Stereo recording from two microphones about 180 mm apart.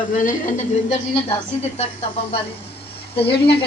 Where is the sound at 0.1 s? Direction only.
45° left (ahead or behind).